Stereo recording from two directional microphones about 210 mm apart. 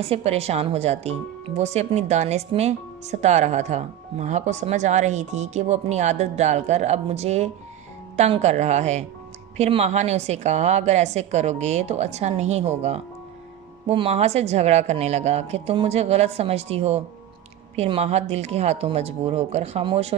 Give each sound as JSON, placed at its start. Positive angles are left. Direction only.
{"t": 0.0, "sound": "speech", "side_deg": -30}